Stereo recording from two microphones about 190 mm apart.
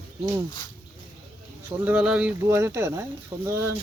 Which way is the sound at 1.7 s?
10° right (ahead or behind).